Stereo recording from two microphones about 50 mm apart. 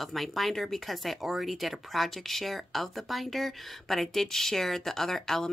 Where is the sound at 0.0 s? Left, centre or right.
Centre.